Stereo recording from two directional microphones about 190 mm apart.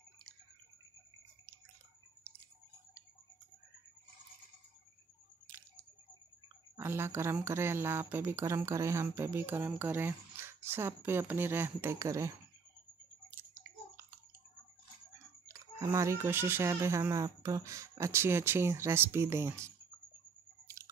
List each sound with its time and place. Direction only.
6.8 s speech: 10° right (ahead or behind)
13.3 s a sound: 10° right (ahead or behind)
15.4 s speech: 15° right (ahead or behind)
20.6 s chewing: 15° right (ahead or behind)